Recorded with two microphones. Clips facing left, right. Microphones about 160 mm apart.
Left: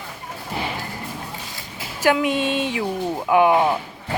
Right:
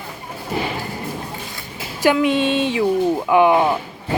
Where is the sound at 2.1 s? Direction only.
10° left (ahead or behind).